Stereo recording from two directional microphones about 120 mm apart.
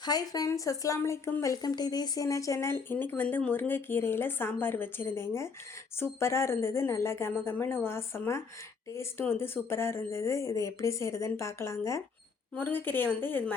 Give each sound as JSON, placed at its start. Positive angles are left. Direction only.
{"t": 0.0, "sound": "a woman's voice", "side_deg": 30}